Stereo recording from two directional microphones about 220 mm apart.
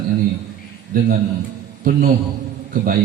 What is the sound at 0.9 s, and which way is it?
Mantra, 40° right (ahead or behind).